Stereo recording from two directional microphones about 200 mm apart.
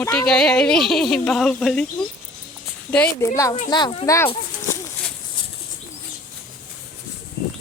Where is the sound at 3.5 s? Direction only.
25° left (ahead or behind).